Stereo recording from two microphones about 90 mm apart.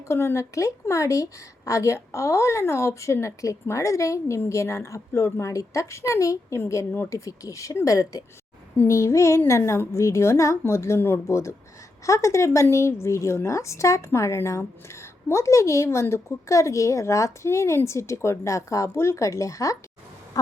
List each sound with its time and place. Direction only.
0.1 s a woman's voice: 30° left (ahead or behind)